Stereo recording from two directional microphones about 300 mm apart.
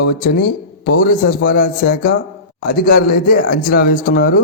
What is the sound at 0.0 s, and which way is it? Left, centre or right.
A man's voice, left.